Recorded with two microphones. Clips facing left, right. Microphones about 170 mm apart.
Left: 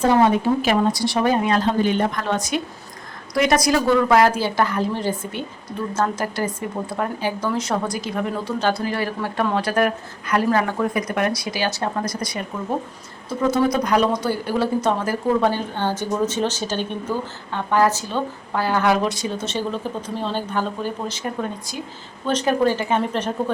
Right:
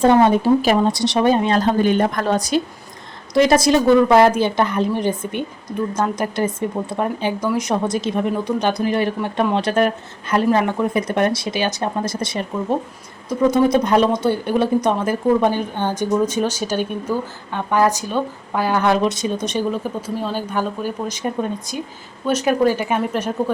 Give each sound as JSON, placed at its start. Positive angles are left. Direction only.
{"t": 0.3, "sound": "speech", "side_deg": -35}
{"t": 0.9, "sound": "a woman's voice", "side_deg": -25}
{"t": 1.6, "sound": "a woman's voice", "side_deg": -45}
{"t": 13.5, "sound": "a woman's voice", "side_deg": -25}
{"t": 22.3, "sound": "speech", "side_deg": -10}